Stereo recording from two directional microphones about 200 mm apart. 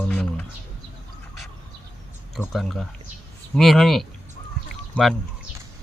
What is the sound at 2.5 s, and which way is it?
Speech, centre (ahead or behind).